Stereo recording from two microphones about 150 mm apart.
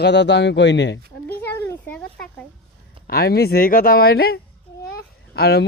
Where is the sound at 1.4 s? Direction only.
15° left (ahead or behind).